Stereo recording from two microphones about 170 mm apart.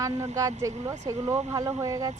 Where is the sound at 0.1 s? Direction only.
40° right (ahead or behind).